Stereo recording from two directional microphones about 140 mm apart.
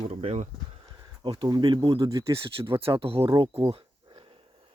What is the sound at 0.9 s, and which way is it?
Speech, 30° right (ahead or behind).